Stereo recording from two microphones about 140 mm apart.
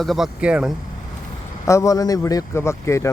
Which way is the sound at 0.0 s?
Centre (ahead or behind).